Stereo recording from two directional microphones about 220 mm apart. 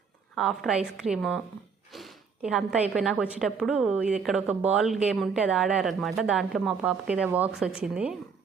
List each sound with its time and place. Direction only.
0.3 s a woman's voice: centre (ahead or behind)